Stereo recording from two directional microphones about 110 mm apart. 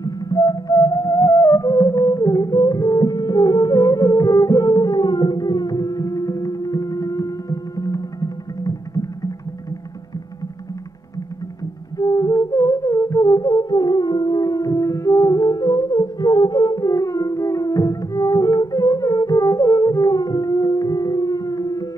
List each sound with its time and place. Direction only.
0.0 s music: 35° left (ahead or behind)
12.0 s music: 35° left (ahead or behind)